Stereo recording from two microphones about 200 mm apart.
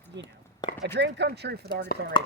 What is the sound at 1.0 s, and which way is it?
Speech, 60° right (ahead or behind).